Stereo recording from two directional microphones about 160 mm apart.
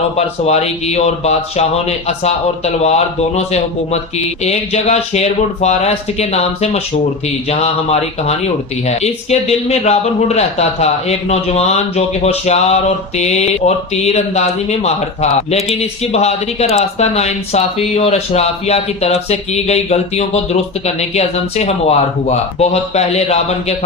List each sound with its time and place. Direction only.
0.2 s speech: 40° left (ahead or behind)